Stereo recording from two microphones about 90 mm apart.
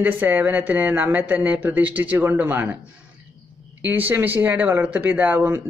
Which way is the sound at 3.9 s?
25° right (ahead or behind).